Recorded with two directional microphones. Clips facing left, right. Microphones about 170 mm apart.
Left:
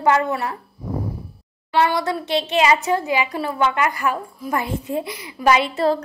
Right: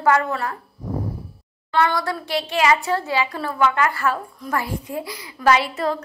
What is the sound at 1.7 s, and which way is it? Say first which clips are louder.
A woman's voice: left 2 dB; 20° left (ahead or behind).